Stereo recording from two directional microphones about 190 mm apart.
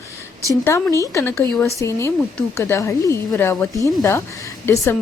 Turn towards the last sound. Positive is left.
turn(degrees=15)  # may be behind; listen again after turning